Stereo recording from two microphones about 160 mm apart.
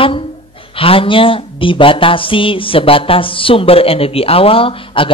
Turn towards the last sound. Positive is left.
turn(degrees=35)  # may be behind; listen again after turning